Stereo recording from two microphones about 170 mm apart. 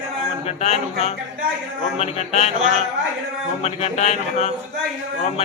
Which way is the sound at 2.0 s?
40° left (ahead or behind).